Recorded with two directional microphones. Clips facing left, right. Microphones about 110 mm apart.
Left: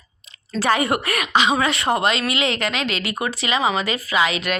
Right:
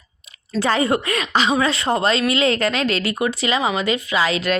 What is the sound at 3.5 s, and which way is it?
Speech, 25° left (ahead or behind).